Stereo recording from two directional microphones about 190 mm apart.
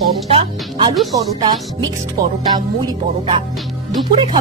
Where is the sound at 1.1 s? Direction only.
20° right (ahead or behind).